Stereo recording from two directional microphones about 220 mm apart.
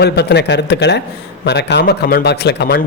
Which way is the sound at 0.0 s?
50° left (ahead or behind).